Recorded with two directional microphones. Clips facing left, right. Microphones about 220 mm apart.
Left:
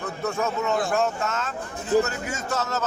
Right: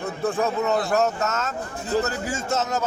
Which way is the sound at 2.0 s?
30° right (ahead or behind).